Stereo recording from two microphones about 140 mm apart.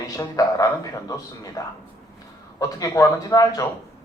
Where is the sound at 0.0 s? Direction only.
25° left (ahead or behind).